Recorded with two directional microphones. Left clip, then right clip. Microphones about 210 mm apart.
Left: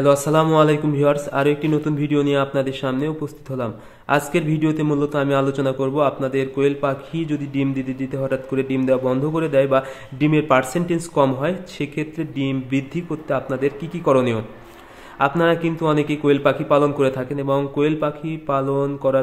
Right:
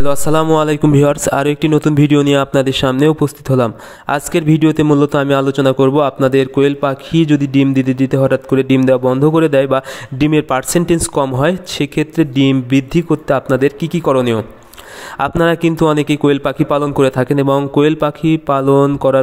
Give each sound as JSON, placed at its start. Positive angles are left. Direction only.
{"t": 0.0, "sound": "a man's voice", "side_deg": -45}